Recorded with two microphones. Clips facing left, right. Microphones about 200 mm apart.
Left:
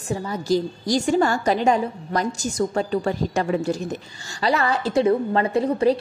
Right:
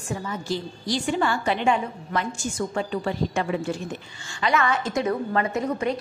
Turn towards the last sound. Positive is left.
turn(degrees=30)  # may be behind; listen again after turning